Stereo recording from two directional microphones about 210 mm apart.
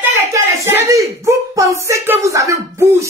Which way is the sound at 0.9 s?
15° right (ahead or behind).